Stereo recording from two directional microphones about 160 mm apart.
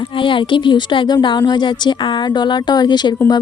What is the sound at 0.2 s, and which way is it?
A woman's voice, 30° left (ahead or behind).